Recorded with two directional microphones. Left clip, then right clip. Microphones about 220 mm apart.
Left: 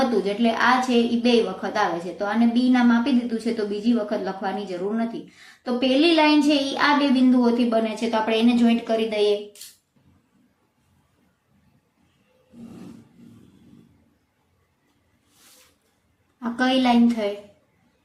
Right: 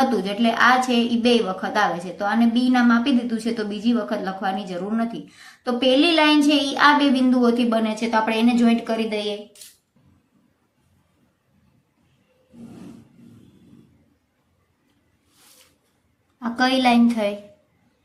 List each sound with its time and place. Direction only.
0.3 s a woman's voice: 40° right (ahead or behind)
16.4 s a woman's voice: 40° right (ahead or behind)